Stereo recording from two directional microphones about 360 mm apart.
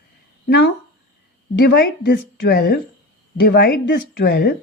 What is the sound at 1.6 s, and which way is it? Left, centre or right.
Speech, left.